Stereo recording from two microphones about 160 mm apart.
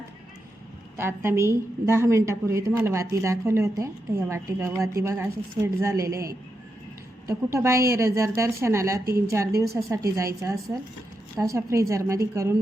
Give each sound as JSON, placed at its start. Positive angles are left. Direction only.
{"t": 0.9, "sound": "a woman's voice", "side_deg": -15}